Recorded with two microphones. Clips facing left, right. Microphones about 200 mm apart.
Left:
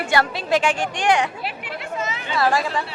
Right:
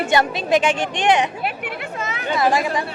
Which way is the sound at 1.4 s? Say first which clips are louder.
Right 4 dB; 60° right (ahead or behind).